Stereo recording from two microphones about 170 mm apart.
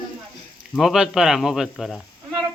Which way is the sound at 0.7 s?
5° right (ahead or behind).